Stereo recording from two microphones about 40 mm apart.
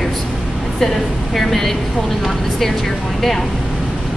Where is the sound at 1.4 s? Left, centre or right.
Centre.